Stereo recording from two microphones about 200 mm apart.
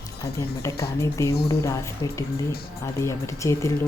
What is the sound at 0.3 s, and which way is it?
Speech, 15° left (ahead or behind).